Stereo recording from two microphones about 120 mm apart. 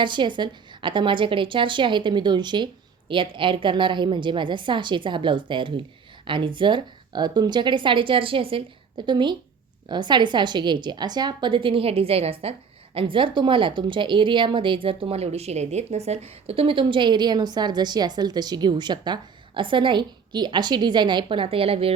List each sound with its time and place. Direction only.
0.0 s a woman's voice: 40° right (ahead or behind)